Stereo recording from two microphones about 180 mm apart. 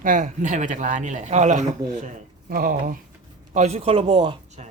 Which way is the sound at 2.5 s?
55° right (ahead or behind).